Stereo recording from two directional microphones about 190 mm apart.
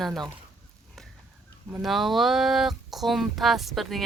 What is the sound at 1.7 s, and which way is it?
Speech, centre (ahead or behind).